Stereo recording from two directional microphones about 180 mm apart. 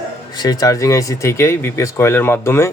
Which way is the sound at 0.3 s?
20° left (ahead or behind).